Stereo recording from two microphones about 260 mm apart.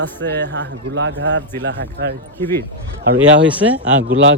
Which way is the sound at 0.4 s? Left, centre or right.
Right.